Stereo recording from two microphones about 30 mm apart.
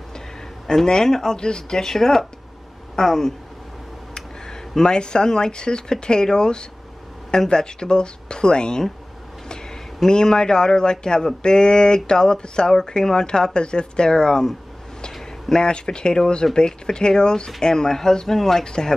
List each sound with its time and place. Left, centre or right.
0.7 s speech: left
4.1 s speech: left
10.0 s speech: left
15.5 s speech: left; by 18.7 s centre
18.7 s speech: left